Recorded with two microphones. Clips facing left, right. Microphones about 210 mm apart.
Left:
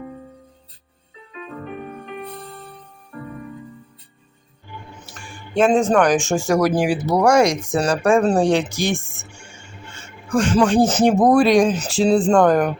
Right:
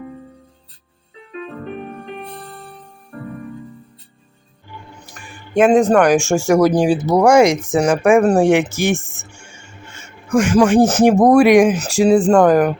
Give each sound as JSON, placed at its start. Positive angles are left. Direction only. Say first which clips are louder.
{"t": 5.5, "sound": "speech", "louder": "right 4 dB", "side_deg": -10}
{"t": 6.8, "sound": "speech", "louder": "right 4 dB", "side_deg": -25}
{"t": 8.7, "sound": "speech", "louder": "right 4 dB", "side_deg": 15}
{"t": 10.2, "sound": "speech", "louder": "right 4 dB", "side_deg": -10}